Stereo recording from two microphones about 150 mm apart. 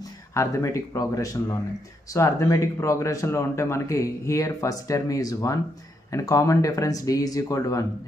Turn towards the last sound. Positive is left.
turn(degrees=20)  # may be behind; listen again after turning